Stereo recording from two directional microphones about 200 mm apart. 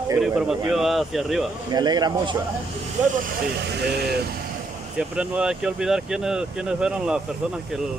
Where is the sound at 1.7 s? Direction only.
20° right (ahead or behind).